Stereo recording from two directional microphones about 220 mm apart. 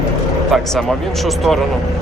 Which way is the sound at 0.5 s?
Centre (ahead or behind).